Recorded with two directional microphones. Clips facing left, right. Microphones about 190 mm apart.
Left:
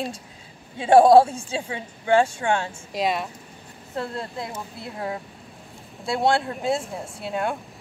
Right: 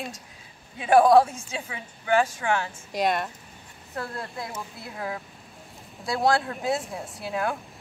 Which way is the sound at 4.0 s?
25° left (ahead or behind).